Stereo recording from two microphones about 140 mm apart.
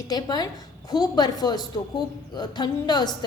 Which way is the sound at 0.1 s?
30° left (ahead or behind).